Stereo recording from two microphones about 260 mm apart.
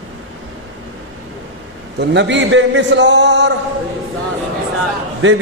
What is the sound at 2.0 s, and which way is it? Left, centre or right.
A man's voice, right.